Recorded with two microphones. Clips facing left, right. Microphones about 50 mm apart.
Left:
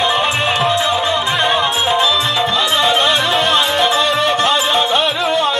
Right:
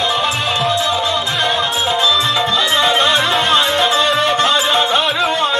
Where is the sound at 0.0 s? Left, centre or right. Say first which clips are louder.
Left 2 dB; left.